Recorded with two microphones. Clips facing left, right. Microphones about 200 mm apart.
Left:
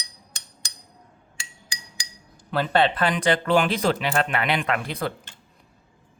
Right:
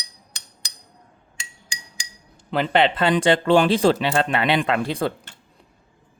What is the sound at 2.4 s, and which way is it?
Speech, 25° right (ahead or behind).